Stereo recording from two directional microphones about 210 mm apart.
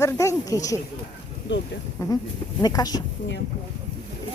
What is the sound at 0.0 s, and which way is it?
Speech, 15° left (ahead or behind).